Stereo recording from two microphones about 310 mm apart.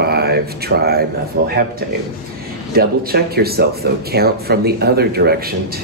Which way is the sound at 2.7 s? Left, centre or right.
Right.